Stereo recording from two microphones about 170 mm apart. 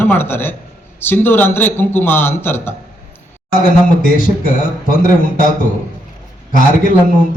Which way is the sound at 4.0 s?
55° left (ahead or behind).